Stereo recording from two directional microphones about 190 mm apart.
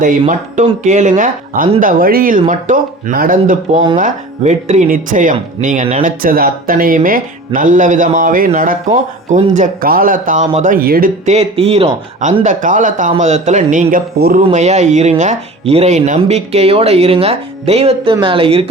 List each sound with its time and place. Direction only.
0.0 s speech: 40° right (ahead or behind)
11.3 s speech: 35° right (ahead or behind)